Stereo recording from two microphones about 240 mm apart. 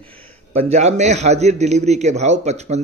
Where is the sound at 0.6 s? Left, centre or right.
Right.